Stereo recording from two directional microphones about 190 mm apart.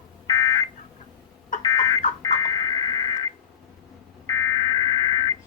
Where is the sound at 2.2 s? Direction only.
20° left (ahead or behind).